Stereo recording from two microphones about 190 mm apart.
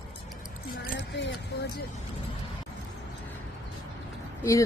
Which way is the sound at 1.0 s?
70° left (ahead or behind).